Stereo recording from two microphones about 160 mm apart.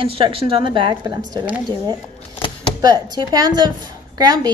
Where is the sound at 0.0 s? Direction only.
35° right (ahead or behind).